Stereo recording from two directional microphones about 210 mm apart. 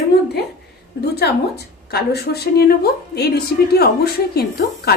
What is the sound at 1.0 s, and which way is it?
A woman's voice, 50° left (ahead or behind).